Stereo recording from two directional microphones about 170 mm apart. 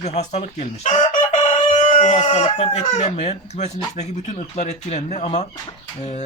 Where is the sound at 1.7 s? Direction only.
40° left (ahead or behind).